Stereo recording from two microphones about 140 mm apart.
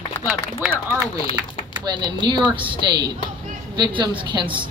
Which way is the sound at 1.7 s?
35° right (ahead or behind).